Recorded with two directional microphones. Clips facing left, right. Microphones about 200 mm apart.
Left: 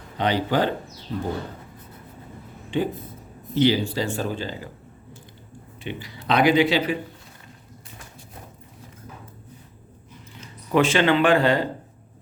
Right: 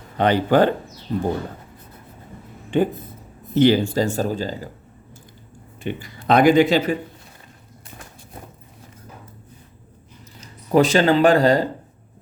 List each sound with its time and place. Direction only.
0.2 s speech: 50° right (ahead or behind)
2.6 s a sound: 50° right (ahead or behind)
3.5 s speech: 50° right (ahead or behind)
5.8 s speech: 50° right (ahead or behind)
10.4 s speech: 40° right (ahead or behind)